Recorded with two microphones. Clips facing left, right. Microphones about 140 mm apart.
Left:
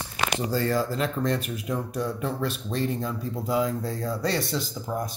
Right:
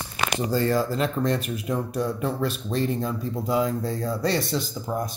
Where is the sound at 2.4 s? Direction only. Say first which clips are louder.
Right 2 dB; 20° right (ahead or behind).